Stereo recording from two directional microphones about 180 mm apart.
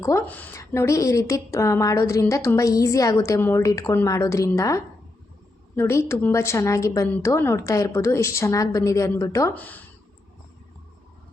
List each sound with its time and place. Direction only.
0.0 s a woman's voice: 15° left (ahead or behind)